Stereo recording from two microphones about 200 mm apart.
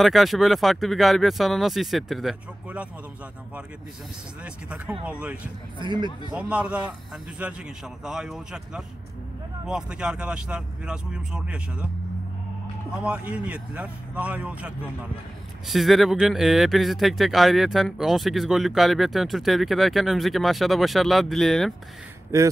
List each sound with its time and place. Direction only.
0.0 s speech: centre (ahead or behind)
5.2 s speech: 5° right (ahead or behind)
5.8 s speech: 20° right (ahead or behind)
6.3 s speech: 5° right (ahead or behind)
12.9 s speech: 5° right (ahead or behind)
22.3 s speech: 15° right (ahead or behind)